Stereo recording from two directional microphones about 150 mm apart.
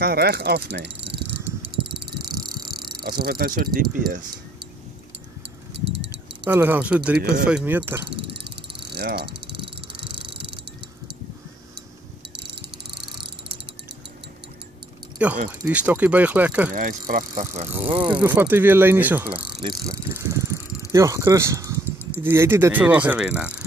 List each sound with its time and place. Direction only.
0.0 s speech: 90° right
2.3 s a sound: 25° right (ahead or behind)
2.6 s speech: 90° right
6.4 s speech: 10° right (ahead or behind)
8.5 s cricket: 90° right
15.2 s speech: 10° right (ahead or behind)
16.7 s speech: 65° right (ahead or behind)
17.8 s speech: 35° right (ahead or behind)
18.2 s speech: 15° right (ahead or behind)